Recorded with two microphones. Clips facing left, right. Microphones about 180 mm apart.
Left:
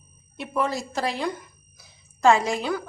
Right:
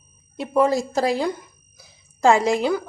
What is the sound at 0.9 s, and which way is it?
Speech, 35° right (ahead or behind).